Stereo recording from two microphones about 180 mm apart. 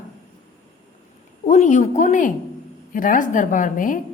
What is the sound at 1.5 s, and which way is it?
A woman's voice, 40° left (ahead or behind).